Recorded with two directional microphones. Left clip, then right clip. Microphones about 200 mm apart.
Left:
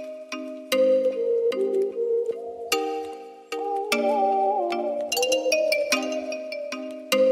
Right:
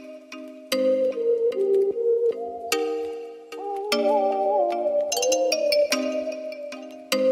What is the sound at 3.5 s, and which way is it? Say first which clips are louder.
Music: left 1 dB; centre (ahead or behind).